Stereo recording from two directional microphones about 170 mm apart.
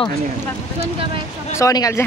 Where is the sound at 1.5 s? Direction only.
20° left (ahead or behind).